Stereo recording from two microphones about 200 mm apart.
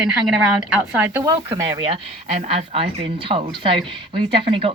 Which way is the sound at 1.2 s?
20° right (ahead or behind).